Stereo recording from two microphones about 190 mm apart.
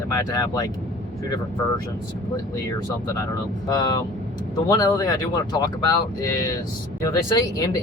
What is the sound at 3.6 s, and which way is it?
Speech, 20° left (ahead or behind).